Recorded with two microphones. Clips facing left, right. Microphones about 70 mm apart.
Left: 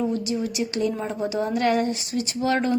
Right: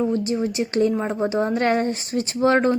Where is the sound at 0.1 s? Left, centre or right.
Right.